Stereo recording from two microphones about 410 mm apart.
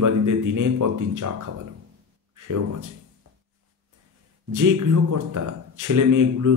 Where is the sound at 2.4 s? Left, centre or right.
Right.